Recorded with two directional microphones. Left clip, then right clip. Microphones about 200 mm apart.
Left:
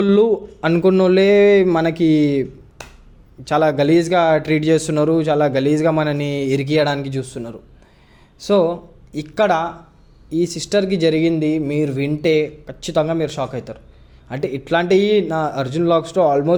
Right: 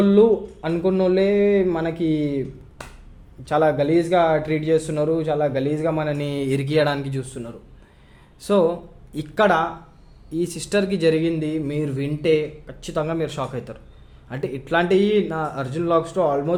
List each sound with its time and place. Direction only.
0.0 s speech: 30° left (ahead or behind)